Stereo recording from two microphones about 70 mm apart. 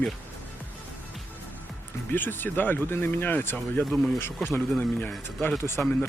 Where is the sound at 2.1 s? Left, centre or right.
Left.